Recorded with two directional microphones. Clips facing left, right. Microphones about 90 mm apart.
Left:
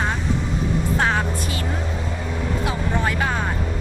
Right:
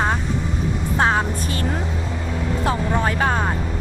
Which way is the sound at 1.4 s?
40° right (ahead or behind).